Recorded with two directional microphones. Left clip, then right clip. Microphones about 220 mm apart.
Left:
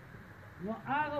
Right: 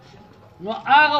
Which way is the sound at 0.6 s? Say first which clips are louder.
Right 19 dB; 5° right (ahead or behind).